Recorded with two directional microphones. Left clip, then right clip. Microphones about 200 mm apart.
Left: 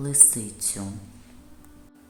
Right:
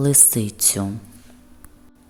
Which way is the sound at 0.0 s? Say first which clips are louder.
Right 5 dB; 35° right (ahead or behind).